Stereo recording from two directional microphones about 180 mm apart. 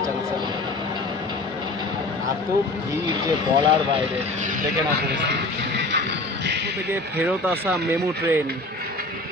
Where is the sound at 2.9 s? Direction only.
25° right (ahead or behind).